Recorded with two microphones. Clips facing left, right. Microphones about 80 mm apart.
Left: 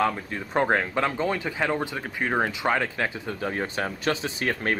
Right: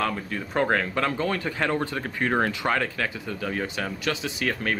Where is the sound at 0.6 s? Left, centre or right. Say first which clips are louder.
Left 1 dB; left.